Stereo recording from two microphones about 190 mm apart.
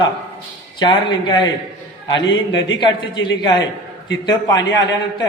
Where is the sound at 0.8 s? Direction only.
20° left (ahead or behind).